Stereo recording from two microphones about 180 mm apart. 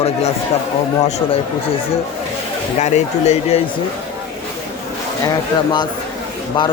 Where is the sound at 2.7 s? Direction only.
40° left (ahead or behind).